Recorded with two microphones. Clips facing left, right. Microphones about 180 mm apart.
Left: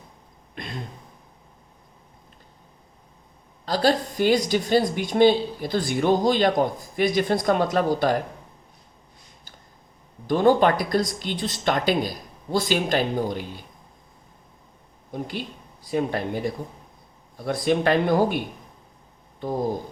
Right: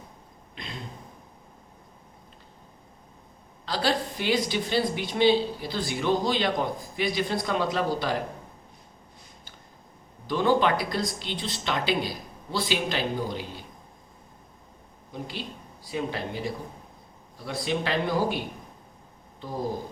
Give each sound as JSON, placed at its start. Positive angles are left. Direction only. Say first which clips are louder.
{"t": 0.6, "sound": "a sound", "louder": "left 5 dB", "side_deg": 50}
{"t": 3.7, "sound": "speech", "louder": "left 5 dB", "side_deg": 45}
{"t": 10.2, "sound": "speech", "louder": "left 5 dB", "side_deg": 50}
{"t": 15.1, "sound": "speech", "louder": "left 5 dB", "side_deg": 50}